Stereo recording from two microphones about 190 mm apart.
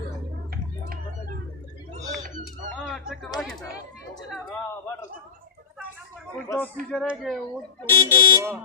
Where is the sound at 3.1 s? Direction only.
5° right (ahead or behind).